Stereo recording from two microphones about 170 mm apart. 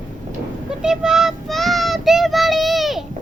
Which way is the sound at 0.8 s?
5° right (ahead or behind).